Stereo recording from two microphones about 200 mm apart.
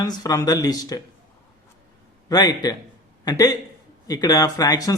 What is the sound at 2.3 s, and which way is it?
Speech, 20° left (ahead or behind).